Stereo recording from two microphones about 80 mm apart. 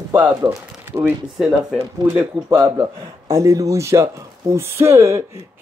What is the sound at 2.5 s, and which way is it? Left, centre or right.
A man's voice, right.